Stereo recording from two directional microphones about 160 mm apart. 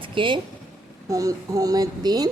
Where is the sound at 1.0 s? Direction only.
20° right (ahead or behind).